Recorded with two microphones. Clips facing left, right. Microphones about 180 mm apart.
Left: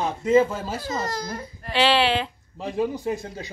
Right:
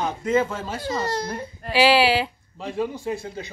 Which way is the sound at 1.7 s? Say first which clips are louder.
Right 3 dB; 10° right (ahead or behind).